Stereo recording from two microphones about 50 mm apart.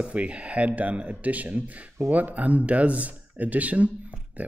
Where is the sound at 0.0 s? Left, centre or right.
Right.